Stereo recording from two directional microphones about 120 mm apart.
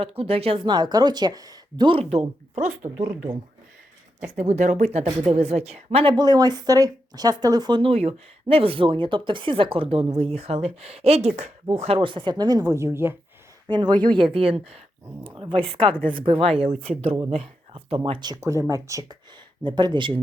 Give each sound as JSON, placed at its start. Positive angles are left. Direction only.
{"t": 0.0, "sound": "speech", "side_deg": -55}
{"t": 1.9, "sound": "speech", "side_deg": -55}
{"t": 4.3, "sound": "speech", "side_deg": -80}
{"t": 5.2, "sound": "speech", "side_deg": -60}
{"t": 6.1, "sound": "speech", "side_deg": -35}
{"t": 11.8, "sound": "speech", "side_deg": -55}
{"t": 13.7, "sound": "speech", "side_deg": -35}
{"t": 14.3, "sound": "speech", "side_deg": -55}
{"t": 18.2, "sound": "speech", "side_deg": -30}
{"t": 19.6, "sound": "speech", "side_deg": -40}